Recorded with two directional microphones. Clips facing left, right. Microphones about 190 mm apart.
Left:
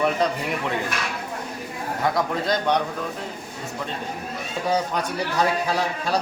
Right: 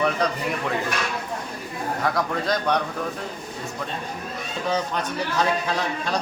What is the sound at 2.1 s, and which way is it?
Speech, 20° left (ahead or behind).